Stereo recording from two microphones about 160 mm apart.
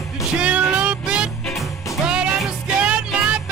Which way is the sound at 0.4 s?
10° right (ahead or behind).